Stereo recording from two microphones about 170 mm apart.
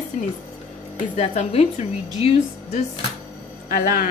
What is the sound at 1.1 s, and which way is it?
Speech, 40° left (ahead or behind).